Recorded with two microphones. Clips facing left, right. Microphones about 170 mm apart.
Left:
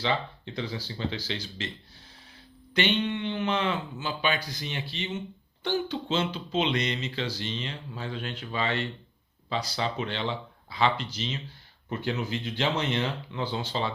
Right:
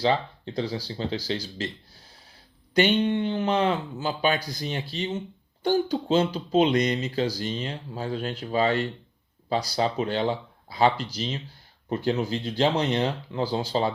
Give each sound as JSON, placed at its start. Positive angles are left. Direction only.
{"t": 0.0, "sound": "speech", "side_deg": -40}
{"t": 2.7, "sound": "speech", "side_deg": -45}